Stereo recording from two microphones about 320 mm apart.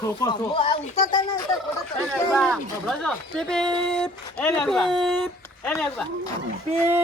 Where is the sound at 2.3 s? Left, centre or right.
Centre.